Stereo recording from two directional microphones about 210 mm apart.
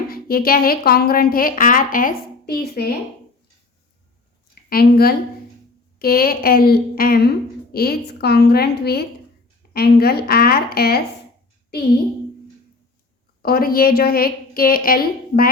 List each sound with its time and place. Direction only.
0.1 s a woman's voice: 45° left (ahead or behind)
4.7 s a woman's voice: 45° left (ahead or behind)
13.4 s a woman's voice: 45° left (ahead or behind)